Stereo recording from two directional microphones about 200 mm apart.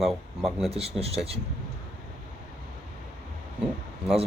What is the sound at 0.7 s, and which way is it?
Speech, 30° right (ahead or behind).